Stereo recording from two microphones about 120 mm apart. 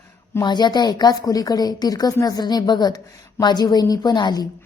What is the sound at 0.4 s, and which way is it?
A woman's voice, 35° left (ahead or behind).